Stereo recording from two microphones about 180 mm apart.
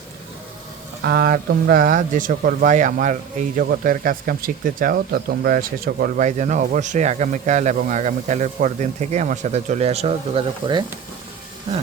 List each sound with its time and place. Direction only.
1.0 s speech: 60° right (ahead or behind); by 10.8 s 30° right (ahead or behind)